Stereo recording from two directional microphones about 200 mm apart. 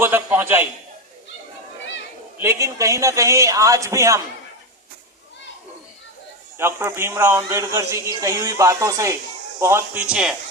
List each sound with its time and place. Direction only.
0.0 s a man's voice: 10° right (ahead or behind)
2.4 s speech: 15° right (ahead or behind)
6.6 s speech: 10° right (ahead or behind)